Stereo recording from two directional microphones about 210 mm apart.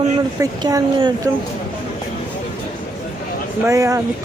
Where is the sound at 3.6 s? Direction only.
15° right (ahead or behind).